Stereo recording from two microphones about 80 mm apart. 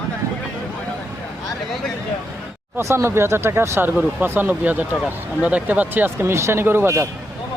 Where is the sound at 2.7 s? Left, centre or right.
Right.